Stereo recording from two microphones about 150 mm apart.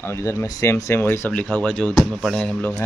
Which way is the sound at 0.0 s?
15° left (ahead or behind).